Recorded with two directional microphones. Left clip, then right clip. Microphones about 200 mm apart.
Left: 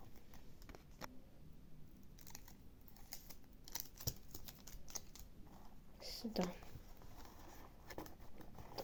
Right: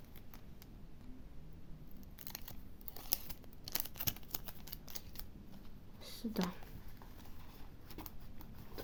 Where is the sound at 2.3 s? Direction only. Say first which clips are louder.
Right 8 dB; 25° right (ahead or behind).